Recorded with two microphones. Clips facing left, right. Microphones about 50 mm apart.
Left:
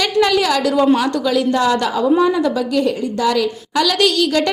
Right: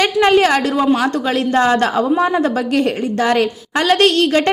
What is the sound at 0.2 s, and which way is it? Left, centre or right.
A woman's voice, right.